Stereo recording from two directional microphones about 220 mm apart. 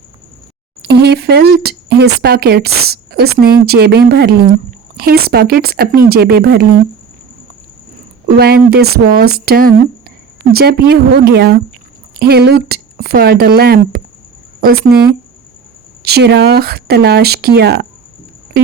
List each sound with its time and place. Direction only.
0.8 s speech: 50° right (ahead or behind)
8.4 s speech: 45° right (ahead or behind)